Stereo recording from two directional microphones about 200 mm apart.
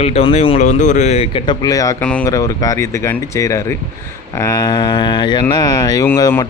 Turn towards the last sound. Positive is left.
turn(degrees=10)  # may be behind; listen again after turning